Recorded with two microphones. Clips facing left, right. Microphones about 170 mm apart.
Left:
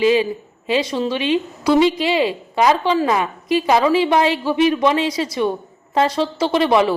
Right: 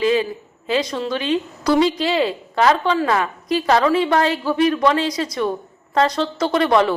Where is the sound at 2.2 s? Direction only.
15° left (ahead or behind).